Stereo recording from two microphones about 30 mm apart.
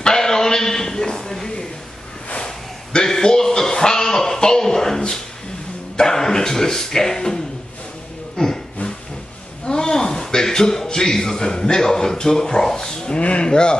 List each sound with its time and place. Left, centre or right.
0.0 s a sound: centre
5.9 s speech: centre
9.7 s a man's voice: left
13.1 s speech: left